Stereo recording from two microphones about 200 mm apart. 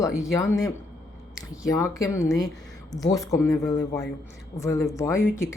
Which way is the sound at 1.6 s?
15° left (ahead or behind).